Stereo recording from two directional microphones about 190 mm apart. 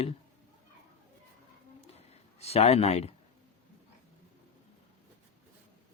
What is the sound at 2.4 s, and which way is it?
Speech, 35° left (ahead or behind).